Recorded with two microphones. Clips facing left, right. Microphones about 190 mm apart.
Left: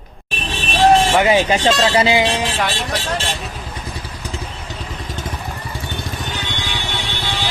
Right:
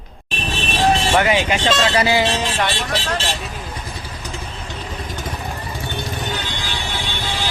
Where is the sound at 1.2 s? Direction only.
35° left (ahead or behind); by 3.2 s 10° left (ahead or behind).